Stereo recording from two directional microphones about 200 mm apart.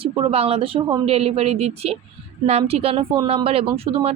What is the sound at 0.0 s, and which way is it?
A woman's voice, 30° right (ahead or behind).